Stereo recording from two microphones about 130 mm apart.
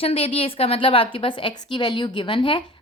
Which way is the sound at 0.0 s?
50° left (ahead or behind).